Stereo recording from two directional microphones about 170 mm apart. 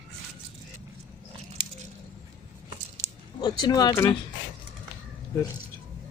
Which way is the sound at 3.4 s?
25° left (ahead or behind).